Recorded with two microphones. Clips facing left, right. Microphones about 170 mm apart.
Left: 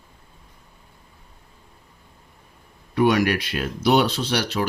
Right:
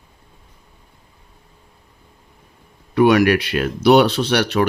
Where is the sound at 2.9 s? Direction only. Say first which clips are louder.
Right 6 dB; 75° right (ahead or behind).